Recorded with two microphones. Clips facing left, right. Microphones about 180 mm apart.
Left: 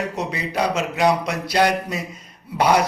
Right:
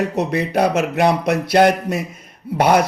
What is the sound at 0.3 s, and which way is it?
A man's voice, 55° right (ahead or behind).